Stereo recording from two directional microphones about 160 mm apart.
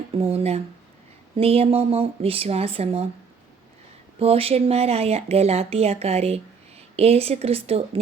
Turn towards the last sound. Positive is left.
turn(degrees=-40)  # may be behind; listen again after turning